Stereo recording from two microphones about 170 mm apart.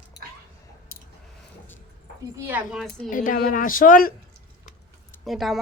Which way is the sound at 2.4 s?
10° right (ahead or behind).